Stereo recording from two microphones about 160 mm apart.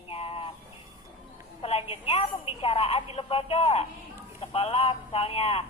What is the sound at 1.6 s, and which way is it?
A woman's voice, 40° left (ahead or behind).